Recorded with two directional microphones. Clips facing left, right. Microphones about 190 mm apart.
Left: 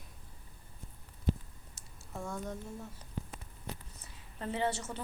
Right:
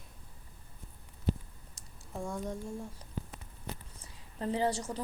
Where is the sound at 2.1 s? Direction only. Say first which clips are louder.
Right 2 dB; 10° right (ahead or behind).